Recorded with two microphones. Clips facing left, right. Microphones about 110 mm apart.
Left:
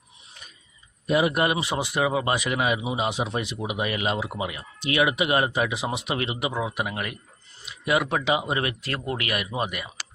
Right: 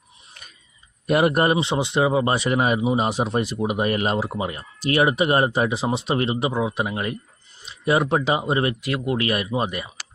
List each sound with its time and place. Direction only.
1.0 s speech: 55° right (ahead or behind)
1.5 s speech: 25° right (ahead or behind)
8.8 s speech: 15° right (ahead or behind)
9.1 s speech: 30° right (ahead or behind)